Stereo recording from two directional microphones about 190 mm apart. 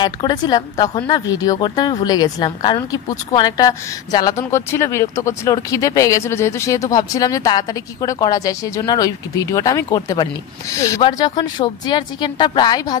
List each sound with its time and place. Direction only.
0.0 s a woman's voice: 20° left (ahead or behind)